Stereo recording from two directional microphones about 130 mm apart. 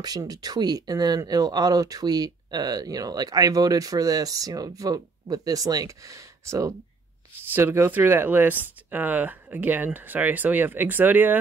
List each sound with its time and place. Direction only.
0.0 s speech: 30° right (ahead or behind); by 11.3 s 15° right (ahead or behind)